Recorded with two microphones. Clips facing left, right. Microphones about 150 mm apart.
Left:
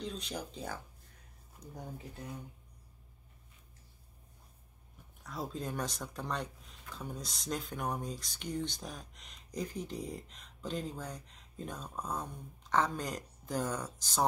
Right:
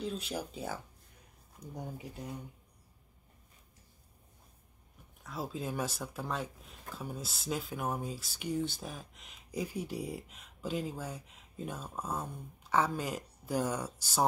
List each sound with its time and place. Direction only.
0.0 s speech: 5° right (ahead or behind)
1.6 s speech: 20° right (ahead or behind)
5.2 s speech: centre (ahead or behind)